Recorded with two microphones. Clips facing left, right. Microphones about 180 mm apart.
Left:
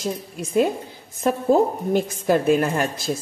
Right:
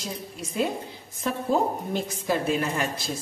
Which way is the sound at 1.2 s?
50° left (ahead or behind).